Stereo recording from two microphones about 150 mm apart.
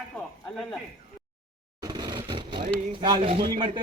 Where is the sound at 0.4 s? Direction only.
5° left (ahead or behind).